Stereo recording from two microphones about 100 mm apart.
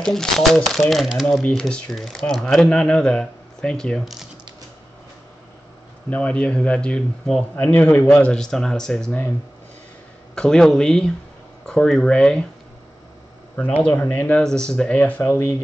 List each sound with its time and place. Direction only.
0.0 s speech: 5° left (ahead or behind)
6.0 s speech: 15° left (ahead or behind)
8.3 s speech: 5° left (ahead or behind)
10.3 s speech: 5° left (ahead or behind)
13.8 s speech: 15° left (ahead or behind)